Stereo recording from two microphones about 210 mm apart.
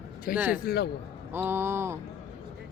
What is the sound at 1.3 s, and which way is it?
Speech, 10° right (ahead or behind).